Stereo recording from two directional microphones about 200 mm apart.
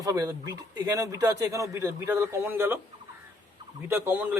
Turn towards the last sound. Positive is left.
turn(degrees=-10)  # may be behind; listen again after turning